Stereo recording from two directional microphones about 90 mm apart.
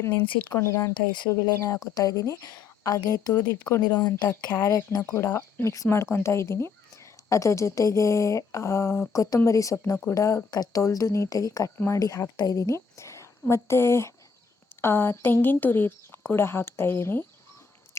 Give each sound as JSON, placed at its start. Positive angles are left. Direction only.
{"t": 0.0, "sound": "speech", "side_deg": 25}
{"t": 4.5, "sound": "a woman's voice", "side_deg": 30}